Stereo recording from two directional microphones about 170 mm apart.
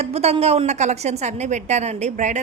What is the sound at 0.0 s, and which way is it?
A woman's voice, 35° right (ahead or behind).